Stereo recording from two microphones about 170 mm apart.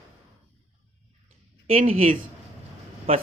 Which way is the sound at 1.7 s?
35° right (ahead or behind).